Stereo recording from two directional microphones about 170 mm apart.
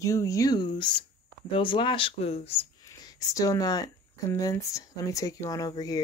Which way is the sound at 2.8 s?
20° left (ahead or behind).